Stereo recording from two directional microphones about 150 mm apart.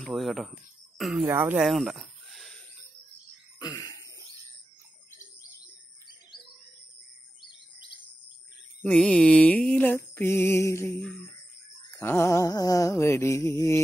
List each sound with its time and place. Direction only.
0.0 s speech: centre (ahead or behind)
1.2 s speech: 15° right (ahead or behind)
1.7 s a sound: centre (ahead or behind)
3.5 s throat clearing: 25° left (ahead or behind)
8.8 s mantra: 5° left (ahead or behind)
11.0 s speech: 5° left (ahead or behind)
12.0 s mantra: 15° left (ahead or behind)